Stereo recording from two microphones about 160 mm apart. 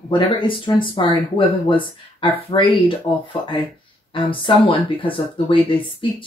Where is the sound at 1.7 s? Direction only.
30° left (ahead or behind).